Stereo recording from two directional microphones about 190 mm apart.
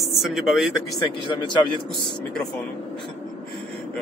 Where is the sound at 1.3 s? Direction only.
25° left (ahead or behind).